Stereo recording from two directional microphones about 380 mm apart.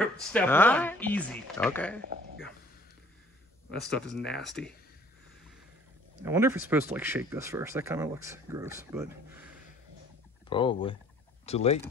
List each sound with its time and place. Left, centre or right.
0.0 s speech: centre
3.7 s speech: centre
6.2 s speech: centre
10.5 s speech: centre